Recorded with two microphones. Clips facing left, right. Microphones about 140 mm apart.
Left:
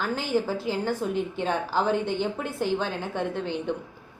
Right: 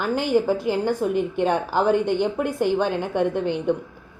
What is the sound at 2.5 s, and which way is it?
Speech, 50° right (ahead or behind).